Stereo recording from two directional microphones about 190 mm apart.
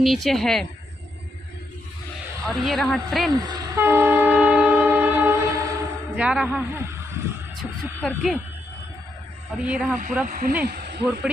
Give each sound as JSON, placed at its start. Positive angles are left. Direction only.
{"t": 0.0, "sound": "speech", "side_deg": 0}
{"t": 2.4, "sound": "speech", "side_deg": 0}
{"t": 3.3, "sound": "speech", "side_deg": -20}
{"t": 3.8, "sound": "train", "side_deg": -10}
{"t": 6.1, "sound": "speech", "side_deg": -5}
{"t": 9.6, "sound": "speech", "side_deg": -5}
{"t": 10.2, "sound": "speech", "side_deg": -50}
{"t": 10.6, "sound": "speech", "side_deg": -60}